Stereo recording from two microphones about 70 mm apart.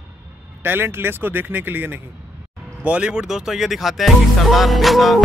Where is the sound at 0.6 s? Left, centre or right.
Right.